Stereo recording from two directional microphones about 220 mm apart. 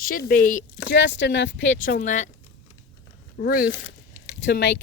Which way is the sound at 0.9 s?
55° left (ahead or behind).